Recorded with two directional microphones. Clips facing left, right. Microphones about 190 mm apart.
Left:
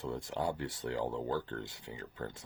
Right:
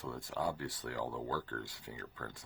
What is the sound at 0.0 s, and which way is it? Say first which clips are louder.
Speech: left 2 dB; 25° left (ahead or behind).